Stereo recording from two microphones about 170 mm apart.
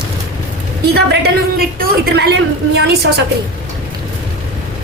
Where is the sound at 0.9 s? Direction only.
70° right (ahead or behind).